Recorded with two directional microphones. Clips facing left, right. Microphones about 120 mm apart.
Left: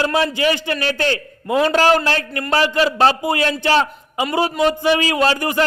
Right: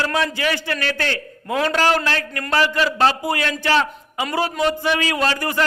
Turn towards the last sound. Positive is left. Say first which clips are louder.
# left 3 dB
turn(degrees=25)  # may be behind; listen again after turning